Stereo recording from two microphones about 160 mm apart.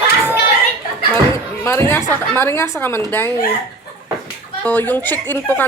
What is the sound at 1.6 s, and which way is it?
A woman's voice, 15° left (ahead or behind).